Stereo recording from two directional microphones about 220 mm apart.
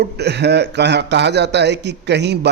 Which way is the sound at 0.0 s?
50° right (ahead or behind).